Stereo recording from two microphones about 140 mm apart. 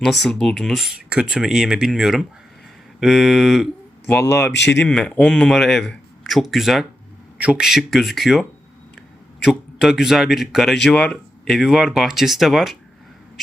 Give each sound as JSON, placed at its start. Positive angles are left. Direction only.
{"t": 0.0, "sound": "speech", "side_deg": 0}
{"t": 4.1, "sound": "speech", "side_deg": 15}
{"t": 4.8, "sound": "speech", "side_deg": 5}